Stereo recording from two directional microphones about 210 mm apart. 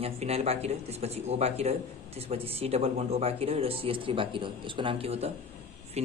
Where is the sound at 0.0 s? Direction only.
30° right (ahead or behind).